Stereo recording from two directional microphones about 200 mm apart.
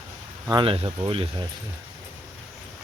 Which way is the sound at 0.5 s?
25° right (ahead or behind).